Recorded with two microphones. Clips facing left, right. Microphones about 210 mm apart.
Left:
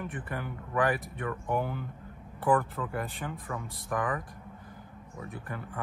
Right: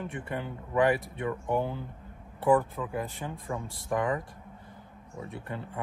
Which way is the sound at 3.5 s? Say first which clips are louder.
Right 5 dB; 25° right (ahead or behind).